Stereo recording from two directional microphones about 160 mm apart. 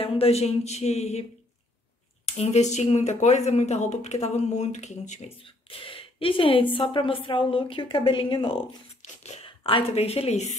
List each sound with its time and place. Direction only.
0.0 s speech: 35° left (ahead or behind)
2.2 s speech: 45° left (ahead or behind)